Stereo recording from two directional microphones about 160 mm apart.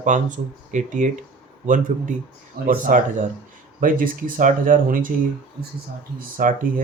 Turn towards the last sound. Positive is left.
turn(degrees=-60)  # may be behind; listen again after turning